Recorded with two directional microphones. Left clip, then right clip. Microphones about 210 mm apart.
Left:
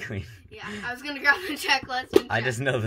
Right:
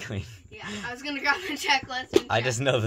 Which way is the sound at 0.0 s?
25° right (ahead or behind).